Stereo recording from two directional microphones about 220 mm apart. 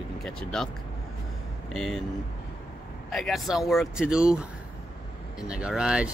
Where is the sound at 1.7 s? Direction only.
Centre (ahead or behind).